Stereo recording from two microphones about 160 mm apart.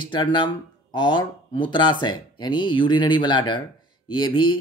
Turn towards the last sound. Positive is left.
turn(degrees=30)  # may be behind; listen again after turning